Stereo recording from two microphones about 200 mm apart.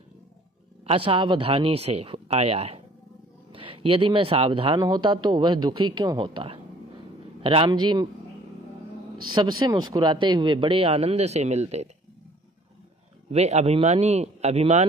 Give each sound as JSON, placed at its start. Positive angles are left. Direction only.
{"t": 0.8, "sound": "speech", "side_deg": -25}
{"t": 9.3, "sound": "speech", "side_deg": -20}
{"t": 13.3, "sound": "speech", "side_deg": -35}